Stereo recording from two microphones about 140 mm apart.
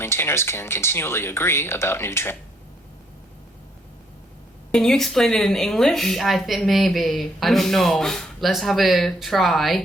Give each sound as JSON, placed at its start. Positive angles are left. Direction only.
{"t": 0.0, "sound": "speech", "side_deg": 15}
{"t": 4.7, "sound": "a woman's voice", "side_deg": 5}